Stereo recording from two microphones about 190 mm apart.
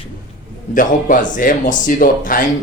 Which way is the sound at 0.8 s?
45° left (ahead or behind).